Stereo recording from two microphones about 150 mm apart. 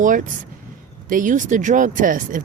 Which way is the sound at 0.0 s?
60° right (ahead or behind).